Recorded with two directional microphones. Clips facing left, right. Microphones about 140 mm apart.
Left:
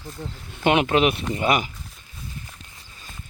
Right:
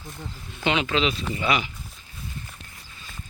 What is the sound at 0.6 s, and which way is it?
Speech, 55° left (ahead or behind).